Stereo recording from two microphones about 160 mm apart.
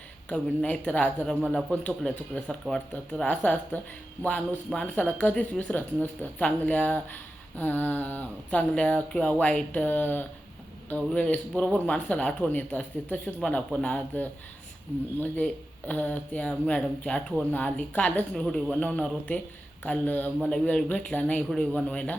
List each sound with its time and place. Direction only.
0.3 s a man's voice: 10° left (ahead or behind)
15.9 s speech: 10° left (ahead or behind)